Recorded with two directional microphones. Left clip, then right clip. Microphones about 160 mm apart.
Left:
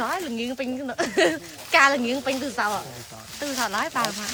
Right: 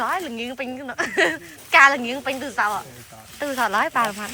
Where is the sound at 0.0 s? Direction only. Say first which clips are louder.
Right 2 dB; 20° left (ahead or behind).